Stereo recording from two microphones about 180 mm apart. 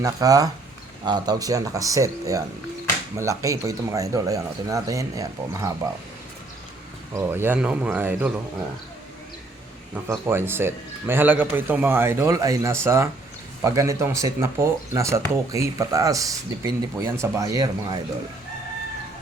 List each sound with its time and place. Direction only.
0.0 s speech: 20° right (ahead or behind)
7.1 s speech: 15° right (ahead or behind)
9.9 s speech: 10° right (ahead or behind)